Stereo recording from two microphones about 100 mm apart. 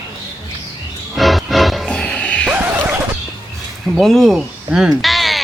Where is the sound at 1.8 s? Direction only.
10° left (ahead or behind).